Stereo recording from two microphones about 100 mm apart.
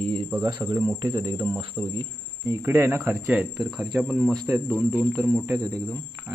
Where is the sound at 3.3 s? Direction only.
5° right (ahead or behind).